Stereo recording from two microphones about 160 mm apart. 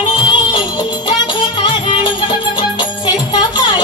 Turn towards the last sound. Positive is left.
turn(degrees=30)  # may be behind; listen again after turning